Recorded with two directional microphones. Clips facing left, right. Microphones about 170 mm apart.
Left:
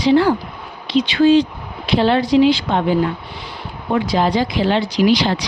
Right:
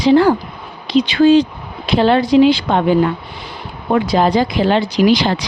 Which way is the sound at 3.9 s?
50° right (ahead or behind).